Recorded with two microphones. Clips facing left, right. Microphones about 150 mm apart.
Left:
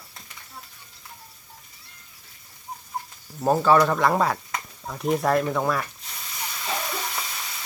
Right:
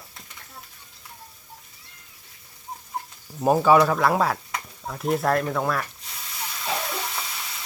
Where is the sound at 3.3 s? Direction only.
10° right (ahead or behind).